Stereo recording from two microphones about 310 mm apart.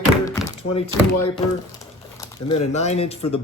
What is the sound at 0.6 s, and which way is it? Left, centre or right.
Speech, left.